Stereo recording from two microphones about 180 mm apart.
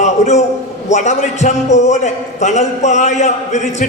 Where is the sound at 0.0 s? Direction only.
40° left (ahead or behind).